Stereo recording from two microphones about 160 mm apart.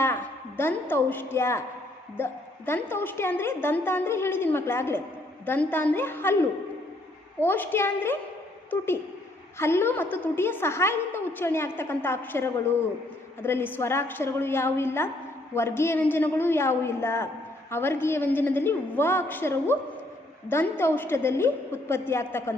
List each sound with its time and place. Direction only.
0.0 s a woman's voice: 15° left (ahead or behind)
7.4 s a woman's voice: 15° left (ahead or behind)
9.6 s a woman's voice: 15° left (ahead or behind)